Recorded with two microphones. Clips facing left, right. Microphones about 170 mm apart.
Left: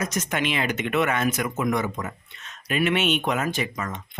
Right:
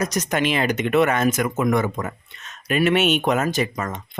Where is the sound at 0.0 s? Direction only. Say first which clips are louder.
Right 4 dB; 35° right (ahead or behind).